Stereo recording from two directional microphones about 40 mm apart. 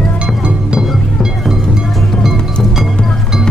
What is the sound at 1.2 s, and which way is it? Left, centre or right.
Music, centre.